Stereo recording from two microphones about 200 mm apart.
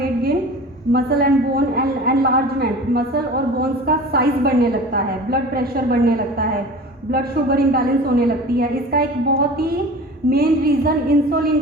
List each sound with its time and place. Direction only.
0.0 s a sound: 50° right (ahead or behind)
0.9 s a woman's voice: 50° right (ahead or behind)
10.2 s a woman's voice: 50° right (ahead or behind)